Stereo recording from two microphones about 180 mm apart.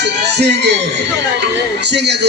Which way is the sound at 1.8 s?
70° right (ahead or behind).